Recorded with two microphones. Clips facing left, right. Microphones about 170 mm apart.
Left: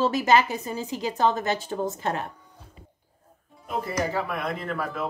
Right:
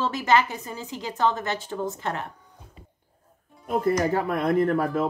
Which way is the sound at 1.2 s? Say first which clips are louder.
Left 1 dB; 40° left (ahead or behind).